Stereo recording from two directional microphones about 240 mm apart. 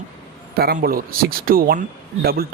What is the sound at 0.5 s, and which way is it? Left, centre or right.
Speech, right.